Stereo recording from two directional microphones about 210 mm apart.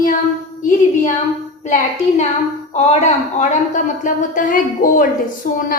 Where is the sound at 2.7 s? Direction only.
35° left (ahead or behind).